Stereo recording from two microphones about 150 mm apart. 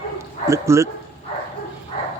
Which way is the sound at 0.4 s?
20° right (ahead or behind).